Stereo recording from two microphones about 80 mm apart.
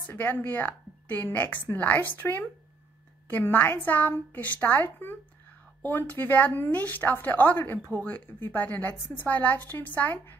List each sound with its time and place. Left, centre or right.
0.2 s a woman's voice: left